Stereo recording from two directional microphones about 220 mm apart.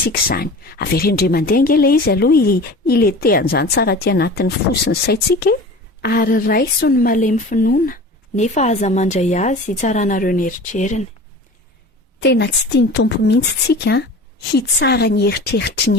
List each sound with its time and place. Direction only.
0.1 s a woman's voice: 45° left (ahead or behind)
12.2 s a woman's voice: 50° left (ahead or behind)